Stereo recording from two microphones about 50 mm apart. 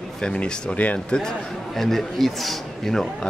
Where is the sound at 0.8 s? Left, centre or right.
Left.